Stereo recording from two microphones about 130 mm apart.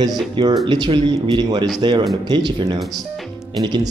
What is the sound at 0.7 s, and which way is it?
Speech, 35° right (ahead or behind).